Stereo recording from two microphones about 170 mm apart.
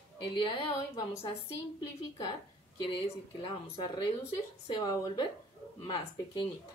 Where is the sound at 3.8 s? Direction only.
30° left (ahead or behind).